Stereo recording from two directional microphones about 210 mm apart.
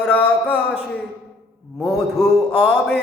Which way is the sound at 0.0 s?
5° left (ahead or behind).